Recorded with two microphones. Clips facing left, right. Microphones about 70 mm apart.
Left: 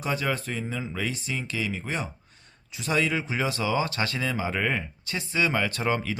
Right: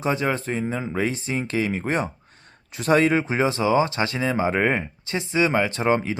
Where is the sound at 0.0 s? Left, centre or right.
Right.